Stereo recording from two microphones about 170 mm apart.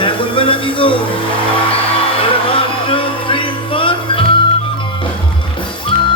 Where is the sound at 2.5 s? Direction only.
30° left (ahead or behind).